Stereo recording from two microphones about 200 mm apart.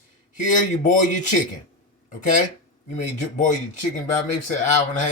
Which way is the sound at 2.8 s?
35° left (ahead or behind).